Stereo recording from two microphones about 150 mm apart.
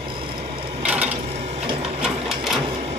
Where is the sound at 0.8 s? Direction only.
10° right (ahead or behind).